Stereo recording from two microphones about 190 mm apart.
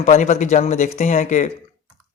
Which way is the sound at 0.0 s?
40° left (ahead or behind).